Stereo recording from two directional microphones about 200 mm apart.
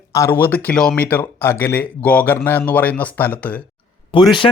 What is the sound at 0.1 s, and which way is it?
Speech, 10° left (ahead or behind).